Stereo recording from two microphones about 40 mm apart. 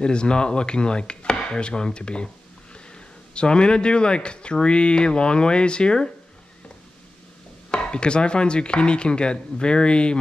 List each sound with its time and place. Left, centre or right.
0.0 s speech: left
7.7 s speech: left